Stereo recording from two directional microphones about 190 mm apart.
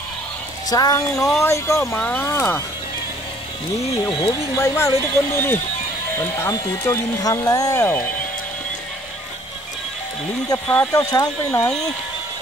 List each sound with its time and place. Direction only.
0.7 s speech: 20° left (ahead or behind)
3.9 s speech: 20° left (ahead or behind)
10.7 s speech: 10° left (ahead or behind)